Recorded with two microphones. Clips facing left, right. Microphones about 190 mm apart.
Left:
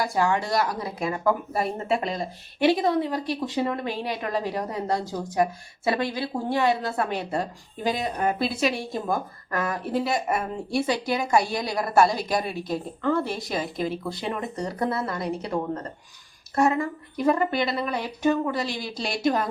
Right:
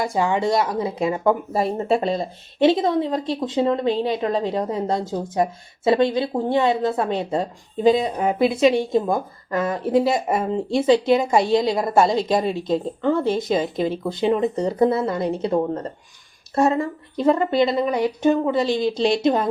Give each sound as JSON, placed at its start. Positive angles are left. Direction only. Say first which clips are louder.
{"t": 0.0, "sound": "speech", "louder": "right 3 dB", "side_deg": -20}